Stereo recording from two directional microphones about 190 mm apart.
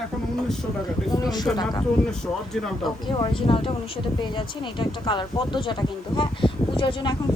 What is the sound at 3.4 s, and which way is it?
Speech, 30° left (ahead or behind).